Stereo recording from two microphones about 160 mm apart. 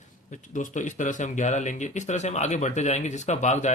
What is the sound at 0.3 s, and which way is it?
Speech, 50° left (ahead or behind).